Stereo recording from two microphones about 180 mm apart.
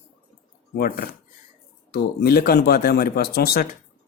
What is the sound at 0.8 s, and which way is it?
Speech, 55° left (ahead or behind).